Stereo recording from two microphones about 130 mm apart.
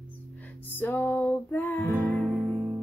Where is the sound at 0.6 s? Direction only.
15° left (ahead or behind).